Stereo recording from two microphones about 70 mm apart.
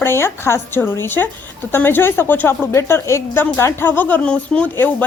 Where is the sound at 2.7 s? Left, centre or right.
Left; by 4.7 s centre.